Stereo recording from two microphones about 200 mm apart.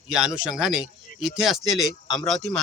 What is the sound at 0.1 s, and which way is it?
Speech, 5° right (ahead or behind).